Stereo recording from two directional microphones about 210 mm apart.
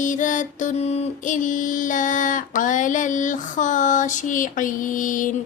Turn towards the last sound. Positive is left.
turn(degrees=40)  # may be behind; listen again after turning